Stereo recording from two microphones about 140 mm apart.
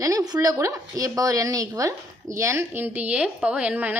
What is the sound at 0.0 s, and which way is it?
Speech, 25° right (ahead or behind).